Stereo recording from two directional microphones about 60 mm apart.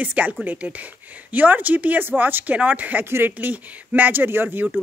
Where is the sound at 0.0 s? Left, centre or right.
Right.